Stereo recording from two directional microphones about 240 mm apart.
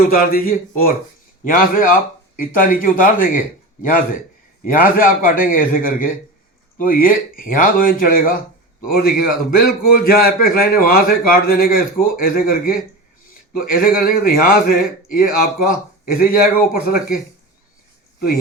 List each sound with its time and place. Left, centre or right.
0.1 s a man's voice: left